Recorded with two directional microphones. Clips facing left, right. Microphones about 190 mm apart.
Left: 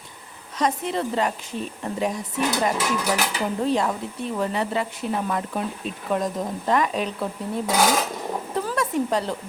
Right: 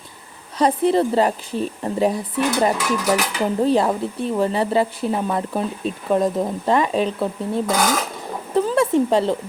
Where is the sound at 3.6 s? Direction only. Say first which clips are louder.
Right 6 dB; 35° right (ahead or behind).